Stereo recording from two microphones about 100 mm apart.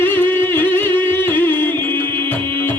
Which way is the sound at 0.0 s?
20° left (ahead or behind).